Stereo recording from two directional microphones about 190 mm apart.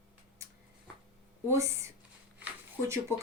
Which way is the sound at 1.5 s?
15° right (ahead or behind).